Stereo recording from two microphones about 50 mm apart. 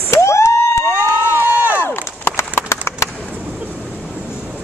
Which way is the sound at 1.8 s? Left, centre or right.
Left.